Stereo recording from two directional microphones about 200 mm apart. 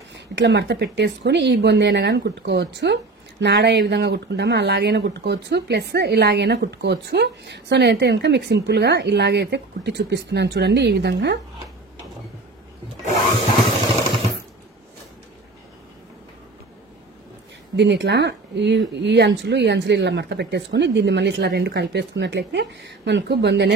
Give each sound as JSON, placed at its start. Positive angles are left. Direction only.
{"t": 0.1, "sound": "speech", "side_deg": -60}
{"t": 17.7, "sound": "speech", "side_deg": -60}